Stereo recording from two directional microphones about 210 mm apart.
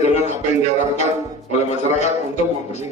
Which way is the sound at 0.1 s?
35° left (ahead or behind).